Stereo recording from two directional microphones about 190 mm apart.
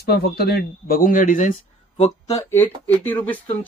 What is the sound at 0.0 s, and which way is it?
Speech, 55° left (ahead or behind).